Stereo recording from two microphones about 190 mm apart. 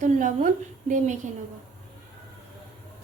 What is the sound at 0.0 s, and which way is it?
A woman's voice, 40° right (ahead or behind).